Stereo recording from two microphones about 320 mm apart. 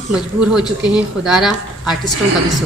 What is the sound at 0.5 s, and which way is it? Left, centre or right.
A woman's voice, centre.